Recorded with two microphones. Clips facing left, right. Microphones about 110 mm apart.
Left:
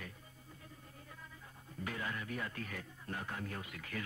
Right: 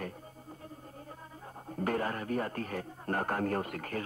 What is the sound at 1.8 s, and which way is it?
A man's voice, 50° right (ahead or behind).